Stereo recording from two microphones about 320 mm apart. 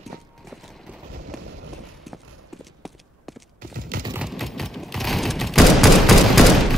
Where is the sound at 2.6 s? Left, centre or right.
Centre.